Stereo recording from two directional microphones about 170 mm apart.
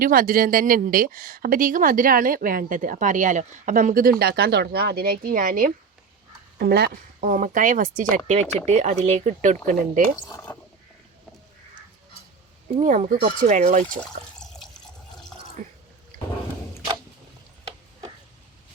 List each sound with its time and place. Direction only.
0.0 s speech: 55° right (ahead or behind)
4.2 s speech: 65° right (ahead or behind)
6.6 s speech: 70° right (ahead or behind)
7.3 s speech: 50° right (ahead or behind)
10.2 s speech: 15° left (ahead or behind)
12.8 s speech: 50° right (ahead or behind)
13.8 s water: 5° left (ahead or behind)
15.6 s drip: 45° right (ahead or behind)